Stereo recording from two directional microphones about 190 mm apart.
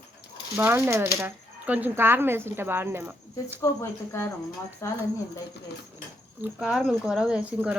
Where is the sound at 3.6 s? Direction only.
15° left (ahead or behind).